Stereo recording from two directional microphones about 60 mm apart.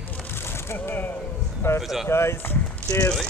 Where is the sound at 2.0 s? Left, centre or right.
Left.